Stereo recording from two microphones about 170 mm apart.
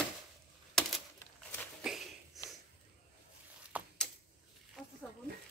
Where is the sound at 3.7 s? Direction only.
10° right (ahead or behind).